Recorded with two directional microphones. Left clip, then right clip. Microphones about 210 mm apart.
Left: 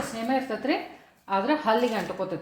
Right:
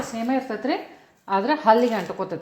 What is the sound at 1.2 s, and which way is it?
Speech, 35° right (ahead or behind).